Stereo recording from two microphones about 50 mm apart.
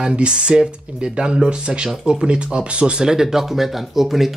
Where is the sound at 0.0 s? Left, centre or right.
Centre.